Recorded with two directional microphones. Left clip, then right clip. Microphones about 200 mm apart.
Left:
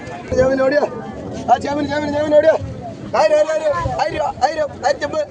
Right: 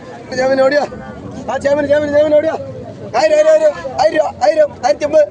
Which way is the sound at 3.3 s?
50° right (ahead or behind).